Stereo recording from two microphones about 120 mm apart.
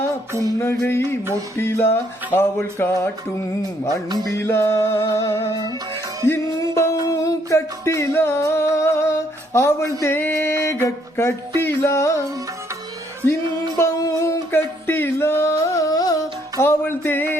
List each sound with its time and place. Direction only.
0.9 s music: 20° left (ahead or behind)
1.2 s music: 25° right (ahead or behind)
1.5 s music: 20° left (ahead or behind)
3.8 s music: 35° right (ahead or behind)
4.4 s music: 20° left (ahead or behind)
13.7 s singing: 25° left (ahead or behind)